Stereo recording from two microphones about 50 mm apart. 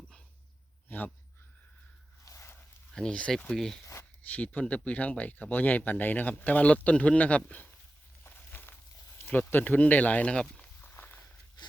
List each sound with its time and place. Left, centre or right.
0.9 s a sound: left
2.3 s dog: left
2.9 s speech: centre
4.3 s speech: left
8.2 s a sound: left
9.2 s speech: left
10.8 s walk: left